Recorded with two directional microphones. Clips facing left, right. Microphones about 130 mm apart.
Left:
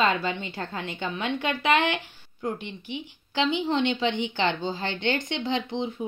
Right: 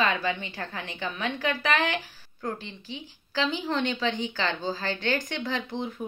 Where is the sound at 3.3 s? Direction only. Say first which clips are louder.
Left 3 dB; 25° left (ahead or behind).